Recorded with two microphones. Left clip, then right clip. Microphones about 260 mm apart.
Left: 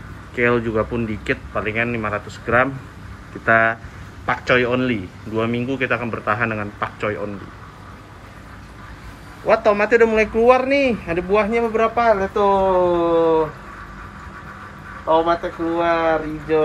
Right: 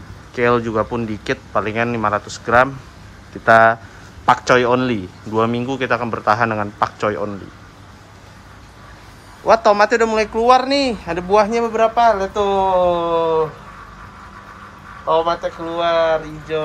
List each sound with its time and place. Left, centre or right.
0.4 s speech: centre
9.5 s speech: centre
15.2 s speech: centre